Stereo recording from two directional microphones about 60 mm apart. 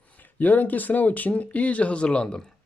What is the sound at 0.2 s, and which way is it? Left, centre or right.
Speech, left.